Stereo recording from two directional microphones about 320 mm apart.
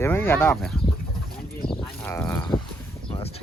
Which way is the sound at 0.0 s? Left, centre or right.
Centre.